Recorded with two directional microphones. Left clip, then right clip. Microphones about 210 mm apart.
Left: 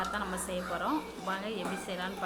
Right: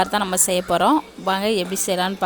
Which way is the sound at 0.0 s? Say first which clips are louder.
Right 14 dB; 55° right (ahead or behind).